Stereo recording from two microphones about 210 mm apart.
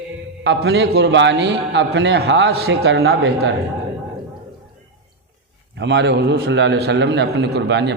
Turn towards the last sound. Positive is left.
turn(degrees=-55)  # may be behind; listen again after turning